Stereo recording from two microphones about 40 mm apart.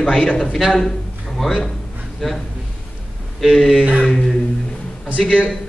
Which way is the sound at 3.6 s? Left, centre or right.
Centre.